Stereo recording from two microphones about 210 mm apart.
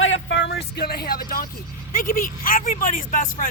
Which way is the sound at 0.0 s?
60° left (ahead or behind).